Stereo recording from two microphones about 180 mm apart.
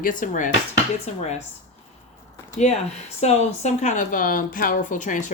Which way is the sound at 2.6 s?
45° left (ahead or behind).